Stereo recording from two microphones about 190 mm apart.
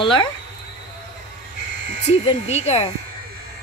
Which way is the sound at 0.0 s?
25° left (ahead or behind).